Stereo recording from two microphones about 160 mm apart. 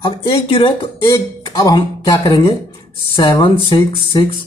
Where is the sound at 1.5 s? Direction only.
20° left (ahead or behind).